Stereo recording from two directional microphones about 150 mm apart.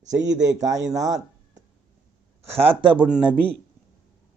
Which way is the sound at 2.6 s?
35° right (ahead or behind).